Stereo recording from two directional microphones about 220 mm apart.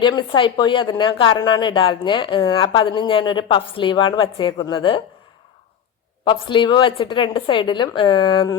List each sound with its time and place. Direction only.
0.0 s speech: 20° left (ahead or behind)
6.2 s speech: 20° left (ahead or behind)